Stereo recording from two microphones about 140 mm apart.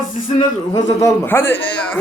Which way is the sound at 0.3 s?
35° left (ahead or behind).